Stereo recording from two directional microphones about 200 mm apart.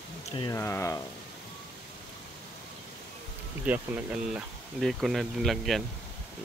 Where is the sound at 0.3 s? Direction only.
25° left (ahead or behind).